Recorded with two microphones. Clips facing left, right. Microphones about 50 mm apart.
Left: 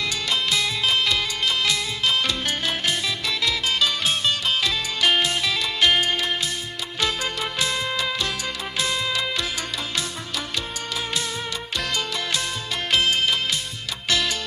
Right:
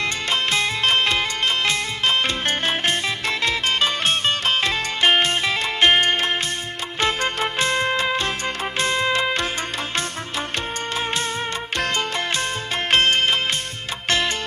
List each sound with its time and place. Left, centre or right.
0.0 s music: right
11.8 s music: right